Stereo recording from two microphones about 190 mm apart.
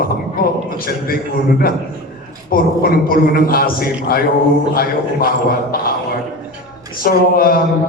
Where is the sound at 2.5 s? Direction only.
50° left (ahead or behind).